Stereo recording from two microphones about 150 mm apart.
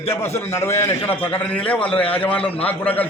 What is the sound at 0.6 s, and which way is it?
A man's voice, 15° left (ahead or behind).